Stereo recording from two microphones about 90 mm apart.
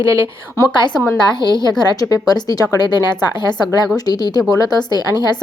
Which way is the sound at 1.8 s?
45° left (ahead or behind).